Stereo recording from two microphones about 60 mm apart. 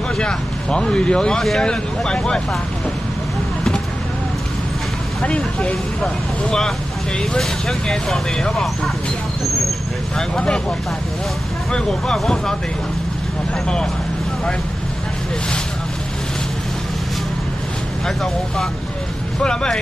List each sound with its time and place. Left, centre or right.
0.2 s speech: centre
5.2 s speech: centre
7.2 s speech: centre
10.1 s speech: centre
11.7 s speech: centre
18.0 s speech: centre